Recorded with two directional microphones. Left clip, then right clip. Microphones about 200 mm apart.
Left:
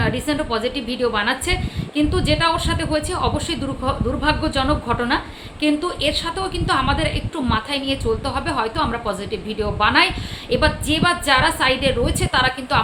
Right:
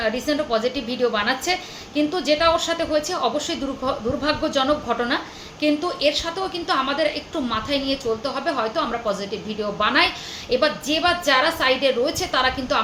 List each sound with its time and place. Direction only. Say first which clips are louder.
0.0 s speech: even; 15° left (ahead or behind)